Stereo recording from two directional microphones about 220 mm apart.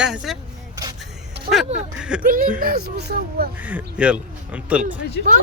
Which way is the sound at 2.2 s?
40° right (ahead or behind).